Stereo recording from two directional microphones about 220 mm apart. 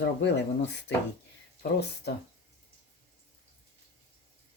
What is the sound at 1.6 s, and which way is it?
Speech, 45° left (ahead or behind).